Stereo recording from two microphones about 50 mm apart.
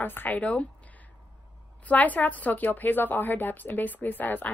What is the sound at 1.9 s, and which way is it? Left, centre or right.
A woman's voice, left.